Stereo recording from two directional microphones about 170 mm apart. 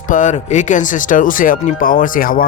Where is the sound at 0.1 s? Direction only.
45° left (ahead or behind).